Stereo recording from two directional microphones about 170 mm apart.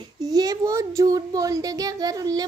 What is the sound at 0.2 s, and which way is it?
A child's voice, 20° right (ahead or behind).